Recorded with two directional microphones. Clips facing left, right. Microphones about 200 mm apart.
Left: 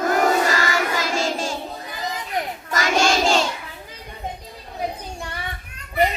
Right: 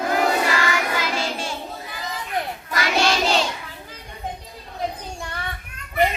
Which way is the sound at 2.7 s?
45° left (ahead or behind).